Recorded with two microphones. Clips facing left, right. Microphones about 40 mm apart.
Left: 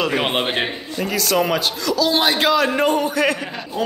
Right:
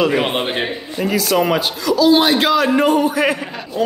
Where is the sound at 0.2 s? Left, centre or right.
Centre.